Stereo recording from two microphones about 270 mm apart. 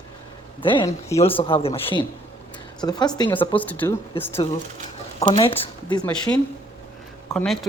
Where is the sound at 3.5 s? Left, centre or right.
Centre.